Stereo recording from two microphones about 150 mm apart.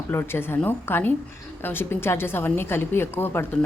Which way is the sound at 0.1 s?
15° left (ahead or behind).